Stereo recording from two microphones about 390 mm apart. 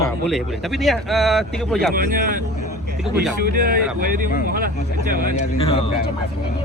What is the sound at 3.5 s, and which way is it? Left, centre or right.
Speech, right.